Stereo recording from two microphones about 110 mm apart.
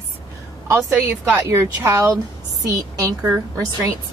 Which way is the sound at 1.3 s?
25° right (ahead or behind).